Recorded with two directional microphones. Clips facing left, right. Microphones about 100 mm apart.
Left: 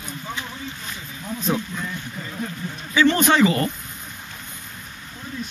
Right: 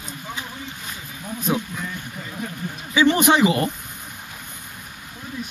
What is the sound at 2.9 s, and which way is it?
Speech, 15° right (ahead or behind).